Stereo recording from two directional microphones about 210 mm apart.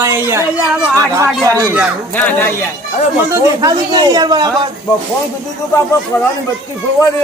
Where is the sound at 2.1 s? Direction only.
10° left (ahead or behind).